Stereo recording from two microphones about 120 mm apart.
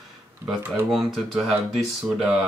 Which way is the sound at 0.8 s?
Centre (ahead or behind).